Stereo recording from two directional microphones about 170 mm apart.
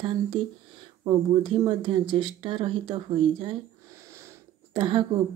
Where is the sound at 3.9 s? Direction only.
15° right (ahead or behind).